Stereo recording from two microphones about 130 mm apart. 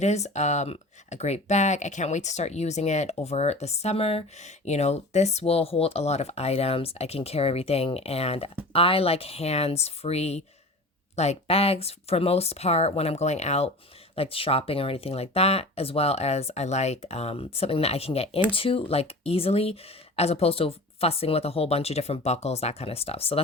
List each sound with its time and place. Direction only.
0.0 s speech: 60° left (ahead or behind)
14.2 s speech: 45° left (ahead or behind)